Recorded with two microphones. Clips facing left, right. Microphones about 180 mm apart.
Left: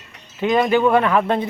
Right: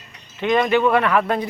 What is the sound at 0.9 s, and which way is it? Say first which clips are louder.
Speech: left 2 dB; 25° left (ahead or behind).